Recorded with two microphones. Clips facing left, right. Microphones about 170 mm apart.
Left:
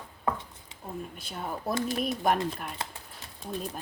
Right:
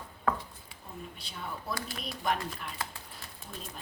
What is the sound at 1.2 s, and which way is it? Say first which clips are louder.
Speech: left 5 dB; 50° left (ahead or behind).